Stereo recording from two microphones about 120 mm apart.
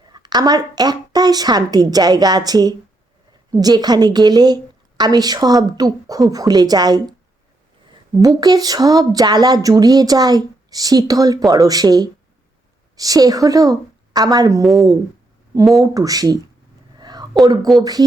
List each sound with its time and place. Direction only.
0.1 s speech: 35° right (ahead or behind)
8.4 s speech: 30° right (ahead or behind)
14.6 s speech: centre (ahead or behind)
15.8 s speech: 30° right (ahead or behind)
17.0 s a sound: 35° right (ahead or behind)
17.4 s speech: 30° right (ahead or behind)